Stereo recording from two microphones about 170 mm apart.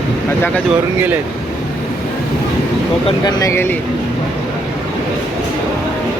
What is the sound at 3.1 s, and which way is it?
Speech, 25° left (ahead or behind).